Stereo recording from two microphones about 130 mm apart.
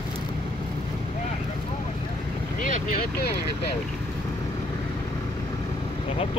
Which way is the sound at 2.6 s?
90° left.